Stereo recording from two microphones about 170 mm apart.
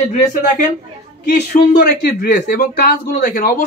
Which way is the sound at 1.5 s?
70° left (ahead or behind).